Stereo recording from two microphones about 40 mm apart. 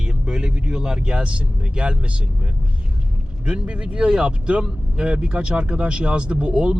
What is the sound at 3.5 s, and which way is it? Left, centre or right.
Speech, right.